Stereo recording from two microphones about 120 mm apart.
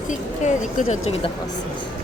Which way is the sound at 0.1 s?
90° left.